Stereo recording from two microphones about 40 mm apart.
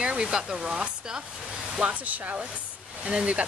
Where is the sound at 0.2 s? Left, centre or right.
Centre.